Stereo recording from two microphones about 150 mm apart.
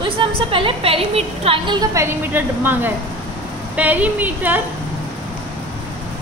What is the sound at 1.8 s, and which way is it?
A woman's voice, 15° right (ahead or behind).